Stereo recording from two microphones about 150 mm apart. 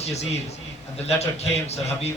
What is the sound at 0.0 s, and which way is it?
A man's voice, 45° left (ahead or behind).